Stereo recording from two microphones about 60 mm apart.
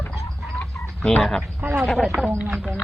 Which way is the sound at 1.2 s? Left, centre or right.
Centre.